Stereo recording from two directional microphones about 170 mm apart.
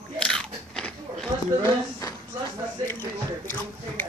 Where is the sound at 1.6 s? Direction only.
20° left (ahead or behind).